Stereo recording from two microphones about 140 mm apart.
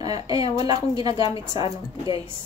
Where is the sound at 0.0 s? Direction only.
25° right (ahead or behind).